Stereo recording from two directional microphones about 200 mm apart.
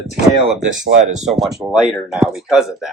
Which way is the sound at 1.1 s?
35° right (ahead or behind).